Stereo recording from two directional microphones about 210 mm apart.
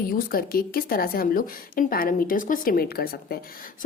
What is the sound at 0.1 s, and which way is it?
A woman's voice, 45° left (ahead or behind).